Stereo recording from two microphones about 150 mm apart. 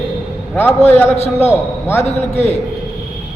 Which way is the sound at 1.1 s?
45° left (ahead or behind).